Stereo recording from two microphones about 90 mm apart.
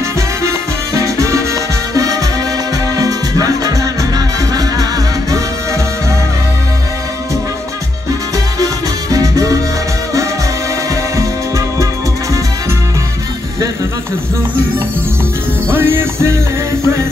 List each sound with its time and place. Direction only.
0.4 s music: 35° right (ahead or behind)
9.1 s music: 40° right (ahead or behind)
11.1 s music: 35° right (ahead or behind)
15.7 s music: 30° right (ahead or behind)